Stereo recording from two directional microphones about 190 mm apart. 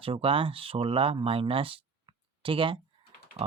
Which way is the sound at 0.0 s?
30° right (ahead or behind).